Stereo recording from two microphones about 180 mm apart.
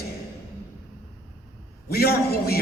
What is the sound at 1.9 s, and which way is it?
Speech, 60° left (ahead or behind).